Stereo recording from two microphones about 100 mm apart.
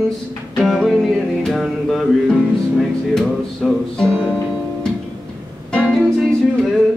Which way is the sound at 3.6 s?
5° right (ahead or behind).